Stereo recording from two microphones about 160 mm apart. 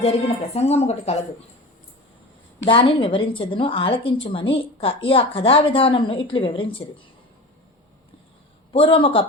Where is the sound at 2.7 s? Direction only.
35° left (ahead or behind).